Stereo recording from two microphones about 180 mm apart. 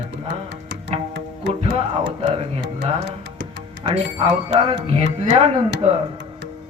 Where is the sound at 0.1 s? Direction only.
75° right (ahead or behind).